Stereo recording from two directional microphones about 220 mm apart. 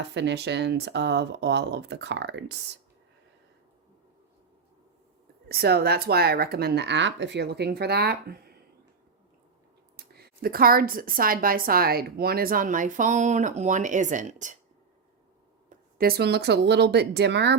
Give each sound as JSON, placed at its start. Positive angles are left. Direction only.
{"t": 0.0, "sound": "speech", "side_deg": -55}
{"t": 5.5, "sound": "speech", "side_deg": -45}
{"t": 10.0, "sound": "a woman's voice", "side_deg": -45}
{"t": 15.7, "sound": "speech", "side_deg": -45}